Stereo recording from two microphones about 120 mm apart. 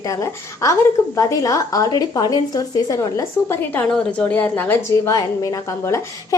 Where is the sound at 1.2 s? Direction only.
30° left (ahead or behind).